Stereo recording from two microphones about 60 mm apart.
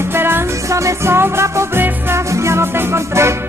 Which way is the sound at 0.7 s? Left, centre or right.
Right.